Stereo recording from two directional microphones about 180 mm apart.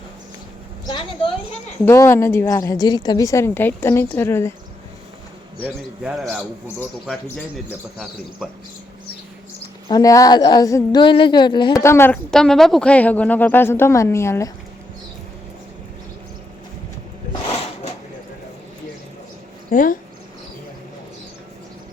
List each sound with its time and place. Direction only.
0.9 s a woman's voice: 25° left (ahead or behind)
1.8 s a woman's voice: 15° left (ahead or behind)
5.6 s speech: 5° right (ahead or behind)
9.9 s a woman's voice: 20° left (ahead or behind)
19.7 s speech: 50° left (ahead or behind)